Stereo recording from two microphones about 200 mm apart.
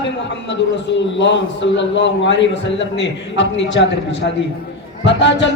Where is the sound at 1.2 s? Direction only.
60° left (ahead or behind).